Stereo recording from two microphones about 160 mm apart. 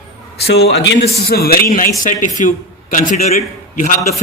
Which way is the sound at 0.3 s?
90° left.